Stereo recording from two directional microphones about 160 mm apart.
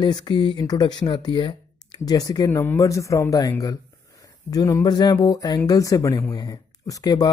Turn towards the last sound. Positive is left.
turn(degrees=25)  # may be behind; listen again after turning